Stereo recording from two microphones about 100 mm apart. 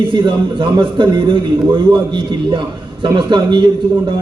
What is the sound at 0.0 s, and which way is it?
A man's voice, 55° right (ahead or behind).